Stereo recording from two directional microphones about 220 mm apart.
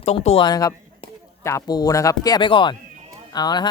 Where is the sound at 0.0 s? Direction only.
30° left (ahead or behind).